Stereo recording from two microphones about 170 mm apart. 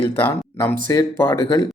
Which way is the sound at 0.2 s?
10° left (ahead or behind).